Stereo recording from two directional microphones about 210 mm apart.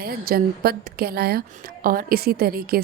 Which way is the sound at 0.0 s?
45° right (ahead or behind).